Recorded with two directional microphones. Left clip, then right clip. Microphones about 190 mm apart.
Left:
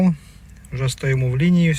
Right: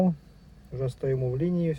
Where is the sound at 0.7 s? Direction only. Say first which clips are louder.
Left 5 dB; 5° right (ahead or behind).